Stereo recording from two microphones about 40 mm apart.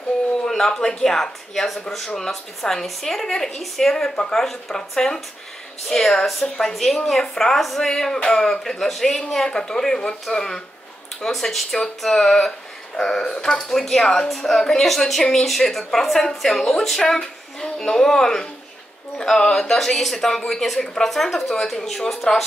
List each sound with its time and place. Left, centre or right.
0.5 s a woman's voice: centre
3.9 s a woman's voice: centre
14.3 s a woman's voice: centre